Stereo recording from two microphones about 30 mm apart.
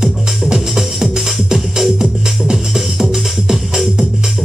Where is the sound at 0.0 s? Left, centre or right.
Centre.